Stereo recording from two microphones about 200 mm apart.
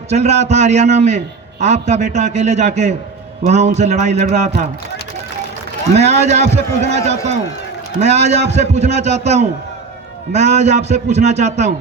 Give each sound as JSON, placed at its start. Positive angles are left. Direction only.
{"t": 0.1, "sound": "a man's voice", "side_deg": -35}
{"t": 5.9, "sound": "a man's voice", "side_deg": -35}